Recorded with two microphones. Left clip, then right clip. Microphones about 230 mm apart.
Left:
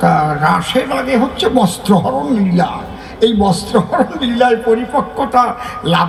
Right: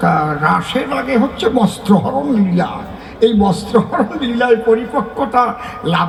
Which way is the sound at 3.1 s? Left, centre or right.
Left.